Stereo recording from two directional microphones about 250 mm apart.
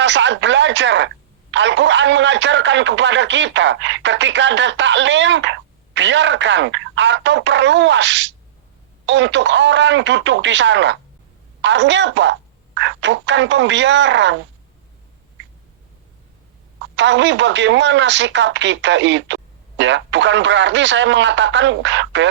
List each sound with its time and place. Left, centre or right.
0.0 s speech: right
17.0 s speech: right